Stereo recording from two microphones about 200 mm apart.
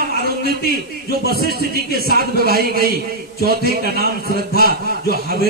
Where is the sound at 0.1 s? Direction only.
50° right (ahead or behind).